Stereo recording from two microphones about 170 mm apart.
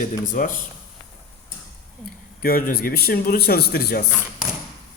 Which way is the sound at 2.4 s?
60° left (ahead or behind).